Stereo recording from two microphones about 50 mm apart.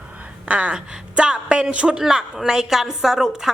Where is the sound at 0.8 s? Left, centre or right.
Centre.